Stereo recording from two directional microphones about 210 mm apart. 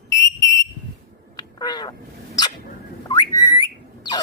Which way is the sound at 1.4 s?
20° left (ahead or behind).